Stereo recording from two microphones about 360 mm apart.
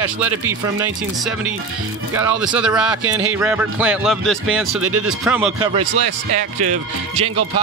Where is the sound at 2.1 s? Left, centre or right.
Centre.